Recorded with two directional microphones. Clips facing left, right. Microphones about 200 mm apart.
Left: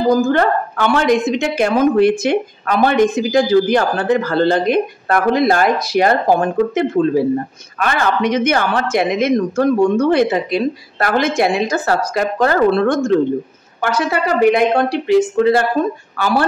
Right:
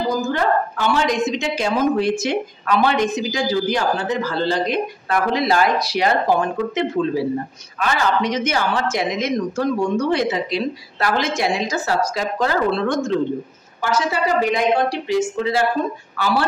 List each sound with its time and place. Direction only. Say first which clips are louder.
0.2 s a woman's voice: left 5 dB; 60° left (ahead or behind)